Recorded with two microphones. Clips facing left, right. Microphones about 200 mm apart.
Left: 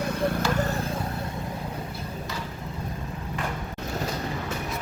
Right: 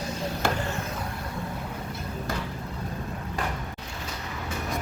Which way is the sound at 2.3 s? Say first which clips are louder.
Right 5 dB; 50° right (ahead or behind).